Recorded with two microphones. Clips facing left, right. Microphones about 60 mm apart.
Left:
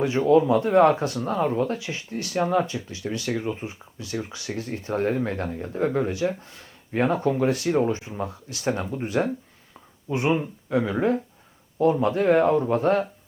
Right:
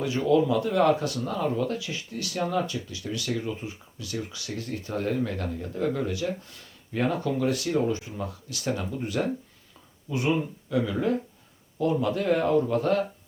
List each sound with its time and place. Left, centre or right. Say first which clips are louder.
0.0 s speech: left 4 dB; left